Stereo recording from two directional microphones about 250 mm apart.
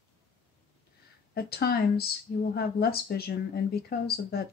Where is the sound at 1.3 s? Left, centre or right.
Left.